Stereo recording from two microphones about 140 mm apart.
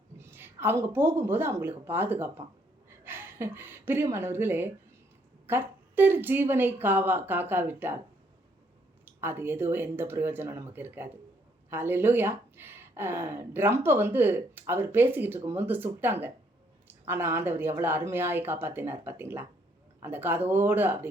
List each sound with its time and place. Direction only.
0.2 s a woman's voice: 15° right (ahead or behind)
9.0 s speech: 15° right (ahead or behind)